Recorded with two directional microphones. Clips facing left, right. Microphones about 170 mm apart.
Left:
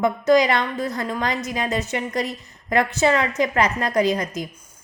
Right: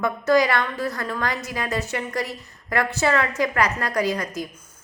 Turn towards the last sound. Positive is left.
turn(degrees=20)  # may be behind; listen again after turning